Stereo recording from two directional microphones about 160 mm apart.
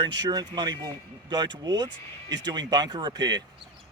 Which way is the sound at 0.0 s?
25° right (ahead or behind).